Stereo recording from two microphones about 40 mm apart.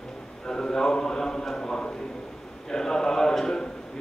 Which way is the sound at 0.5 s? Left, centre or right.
Centre.